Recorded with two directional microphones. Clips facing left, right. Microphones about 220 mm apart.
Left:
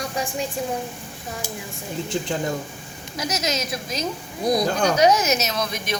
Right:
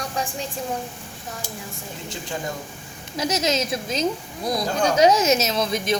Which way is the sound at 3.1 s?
25° right (ahead or behind).